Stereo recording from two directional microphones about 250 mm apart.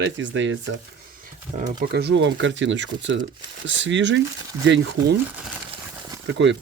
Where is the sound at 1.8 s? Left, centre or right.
Right.